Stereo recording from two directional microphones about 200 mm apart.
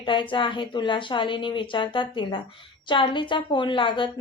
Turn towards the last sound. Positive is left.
turn(degrees=25)  # may be behind; listen again after turning